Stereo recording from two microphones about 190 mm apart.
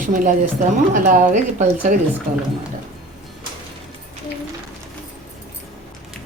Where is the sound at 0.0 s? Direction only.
45° right (ahead or behind).